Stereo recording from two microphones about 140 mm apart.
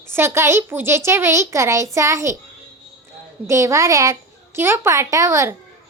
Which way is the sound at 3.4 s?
20° right (ahead or behind).